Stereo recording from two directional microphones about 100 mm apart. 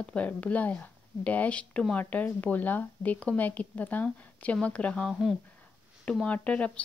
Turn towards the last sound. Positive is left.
turn(degrees=10)  # may be behind; listen again after turning